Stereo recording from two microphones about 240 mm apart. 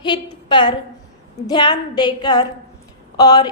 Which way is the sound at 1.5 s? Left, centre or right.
Centre.